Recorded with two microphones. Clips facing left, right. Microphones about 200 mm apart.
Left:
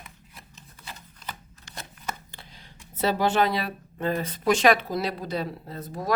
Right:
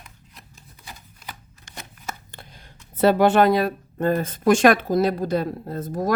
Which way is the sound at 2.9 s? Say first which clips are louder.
Right 7 dB; 55° right (ahead or behind).